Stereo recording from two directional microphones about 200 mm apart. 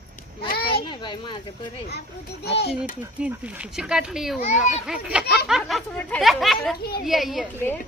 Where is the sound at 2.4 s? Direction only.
55° left (ahead or behind).